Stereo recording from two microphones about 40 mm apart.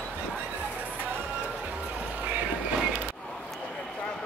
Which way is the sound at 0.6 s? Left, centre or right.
Right.